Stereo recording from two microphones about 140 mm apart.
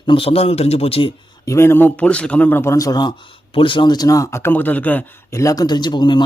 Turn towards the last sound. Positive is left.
turn(degrees=30)  # may be behind; listen again after turning